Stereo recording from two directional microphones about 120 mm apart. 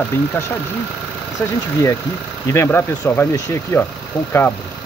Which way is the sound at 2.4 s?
20° left (ahead or behind).